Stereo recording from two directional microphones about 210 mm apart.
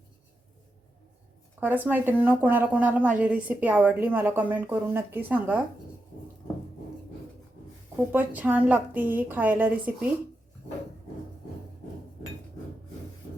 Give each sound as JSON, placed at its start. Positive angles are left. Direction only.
{"t": 1.6, "sound": "a woman's voice", "side_deg": -10}
{"t": 8.1, "sound": "a woman's voice", "side_deg": -10}